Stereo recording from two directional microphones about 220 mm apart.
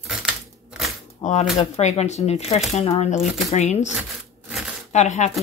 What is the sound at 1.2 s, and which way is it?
Speech, 35° left (ahead or behind).